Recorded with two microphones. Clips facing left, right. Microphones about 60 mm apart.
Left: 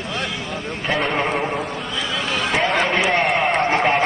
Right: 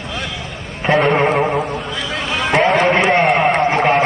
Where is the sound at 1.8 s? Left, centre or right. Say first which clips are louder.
Right 2 dB; right.